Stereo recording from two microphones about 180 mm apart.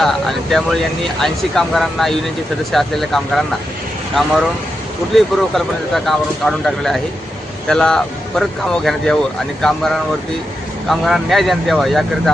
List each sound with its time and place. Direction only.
0.0 s speech: centre (ahead or behind)
5.1 s speech: centre (ahead or behind)